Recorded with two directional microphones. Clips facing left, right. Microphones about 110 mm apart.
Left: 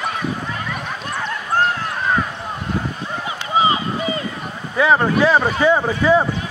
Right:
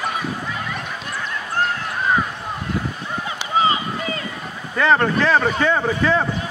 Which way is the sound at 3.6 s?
20° left (ahead or behind).